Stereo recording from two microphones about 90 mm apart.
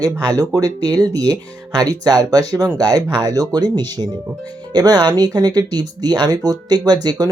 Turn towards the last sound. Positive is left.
turn(degrees=-50)  # may be behind; listen again after turning